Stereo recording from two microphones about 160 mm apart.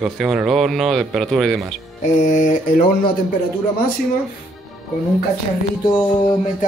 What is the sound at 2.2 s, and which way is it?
Mantra, 55° left (ahead or behind).